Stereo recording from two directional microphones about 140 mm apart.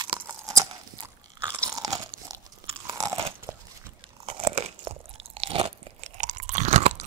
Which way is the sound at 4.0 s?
35° right (ahead or behind).